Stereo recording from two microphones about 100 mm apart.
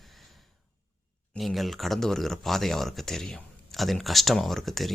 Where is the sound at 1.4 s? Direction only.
Centre (ahead or behind).